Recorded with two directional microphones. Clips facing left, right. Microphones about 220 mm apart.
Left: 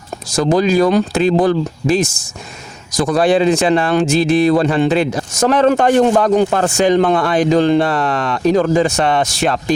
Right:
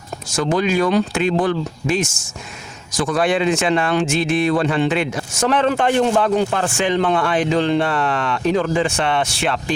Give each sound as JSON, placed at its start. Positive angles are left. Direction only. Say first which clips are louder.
{"t": 0.3, "sound": "speech", "louder": "left 5 dB", "side_deg": 35}